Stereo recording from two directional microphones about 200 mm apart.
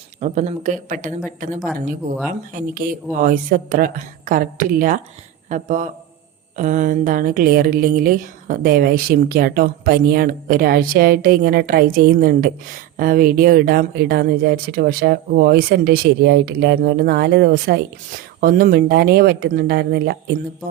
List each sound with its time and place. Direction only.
0.2 s a woman's voice: 35° right (ahead or behind); by 20.3 s 55° right (ahead or behind)